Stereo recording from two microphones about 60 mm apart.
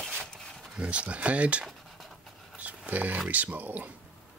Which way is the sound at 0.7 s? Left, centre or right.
Right.